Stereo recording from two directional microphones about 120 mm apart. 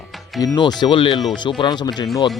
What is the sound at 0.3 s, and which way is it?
Speech, 35° left (ahead or behind).